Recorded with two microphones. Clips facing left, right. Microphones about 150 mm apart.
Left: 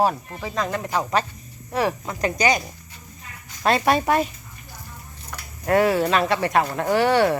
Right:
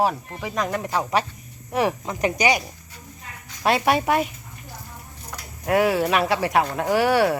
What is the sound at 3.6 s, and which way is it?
Speech, 10° right (ahead or behind).